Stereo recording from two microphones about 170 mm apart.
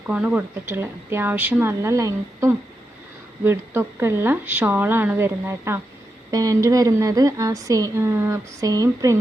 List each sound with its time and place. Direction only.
0.1 s a woman's voice: 10° right (ahead or behind)